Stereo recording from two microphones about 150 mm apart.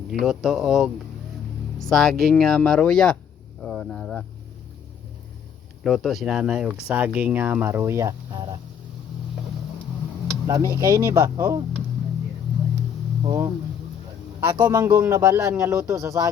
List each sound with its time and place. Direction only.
0.1 s speech: centre (ahead or behind)
1.9 s speech: 5° left (ahead or behind)
3.6 s a sound: 5° left (ahead or behind)
5.8 s speech: centre (ahead or behind); by 8.4 s 25° right (ahead or behind)
10.4 s speech: 20° right (ahead or behind)
13.2 s speech: 25° right (ahead or behind)
14.5 s speech: 25° right (ahead or behind)